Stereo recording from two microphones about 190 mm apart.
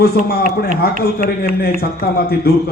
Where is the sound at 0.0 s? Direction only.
55° left (ahead or behind).